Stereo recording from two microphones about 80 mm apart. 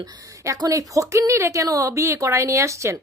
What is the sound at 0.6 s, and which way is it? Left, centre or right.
A woman's voice, right.